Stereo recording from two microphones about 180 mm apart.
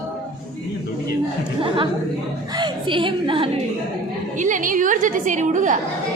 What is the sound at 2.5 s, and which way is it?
Speech, 25° right (ahead or behind).